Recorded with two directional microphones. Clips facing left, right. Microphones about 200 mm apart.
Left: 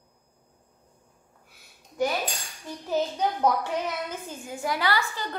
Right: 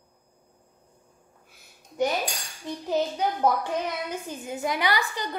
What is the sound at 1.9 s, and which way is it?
Cutlery, 20° right (ahead or behind).